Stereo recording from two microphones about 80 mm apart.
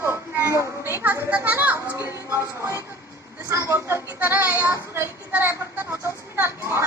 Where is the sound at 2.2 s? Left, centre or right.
Right.